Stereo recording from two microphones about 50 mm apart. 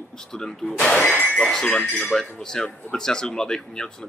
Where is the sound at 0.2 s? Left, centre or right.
Centre.